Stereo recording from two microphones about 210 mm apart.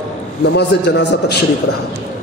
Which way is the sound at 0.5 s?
55° left (ahead or behind).